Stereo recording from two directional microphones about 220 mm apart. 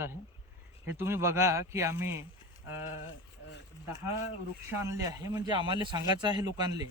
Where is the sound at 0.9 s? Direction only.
10° right (ahead or behind).